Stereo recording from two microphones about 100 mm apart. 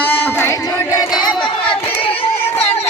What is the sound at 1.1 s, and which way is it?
Crowd, 45° left (ahead or behind).